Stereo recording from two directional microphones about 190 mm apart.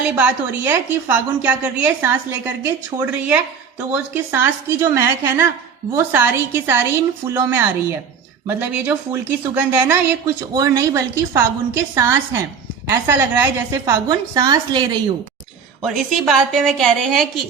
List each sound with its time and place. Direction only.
0.2 s a woman's voice: 10° right (ahead or behind); by 14.8 s 25° right (ahead or behind)
15.8 s a woman's voice: centre (ahead or behind)